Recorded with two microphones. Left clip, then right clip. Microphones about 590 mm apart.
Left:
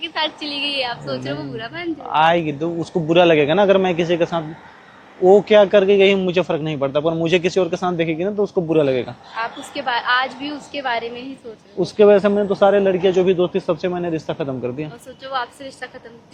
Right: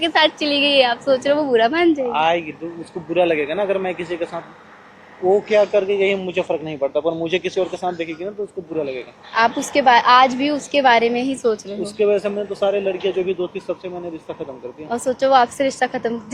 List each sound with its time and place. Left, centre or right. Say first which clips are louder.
0.0 s a woman's voice: right 7 dB; right
2.0 s speech: left 3 dB; left
5.5 s a man's voice: left 4 dB; left
9.3 s a woman's voice: right 11 dB; right
11.8 s speech: left 8 dB; left
15.0 s a woman's voice: right 13 dB; right